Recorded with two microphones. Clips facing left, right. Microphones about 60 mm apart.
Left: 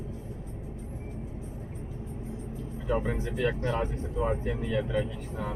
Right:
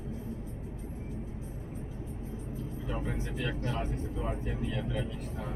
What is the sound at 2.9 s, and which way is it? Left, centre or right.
Speech, left.